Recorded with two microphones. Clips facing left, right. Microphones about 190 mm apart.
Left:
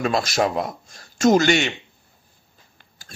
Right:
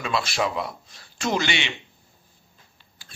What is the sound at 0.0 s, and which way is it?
A man's voice, 40° left (ahead or behind).